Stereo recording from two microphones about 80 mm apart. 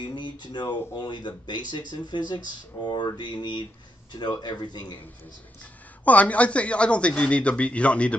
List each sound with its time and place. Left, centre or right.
0.0 s speech: left
6.0 s speech: centre